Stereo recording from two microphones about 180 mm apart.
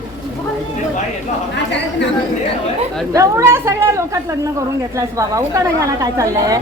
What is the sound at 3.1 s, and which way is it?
A woman's voice, 15° right (ahead or behind).